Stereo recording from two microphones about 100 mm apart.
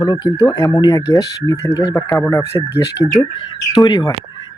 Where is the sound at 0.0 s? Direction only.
40° left (ahead or behind).